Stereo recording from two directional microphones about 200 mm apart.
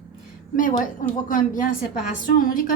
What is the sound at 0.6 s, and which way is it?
A woman's voice, 40° left (ahead or behind).